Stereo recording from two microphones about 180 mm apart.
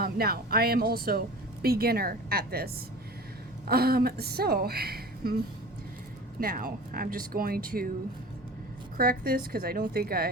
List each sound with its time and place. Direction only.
0.0 s a woman's voice: 55° right (ahead or behind)
3.7 s a woman's voice: 60° right (ahead or behind)
6.4 s speech: 50° right (ahead or behind)
9.0 s a woman's voice: 55° right (ahead or behind)